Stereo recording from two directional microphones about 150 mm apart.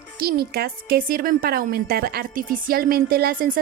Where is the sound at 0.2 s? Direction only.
90° right.